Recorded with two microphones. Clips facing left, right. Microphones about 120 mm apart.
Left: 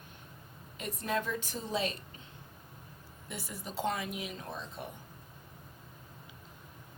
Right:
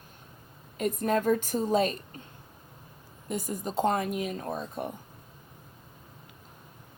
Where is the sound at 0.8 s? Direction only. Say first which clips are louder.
Right 8 dB; 45° right (ahead or behind).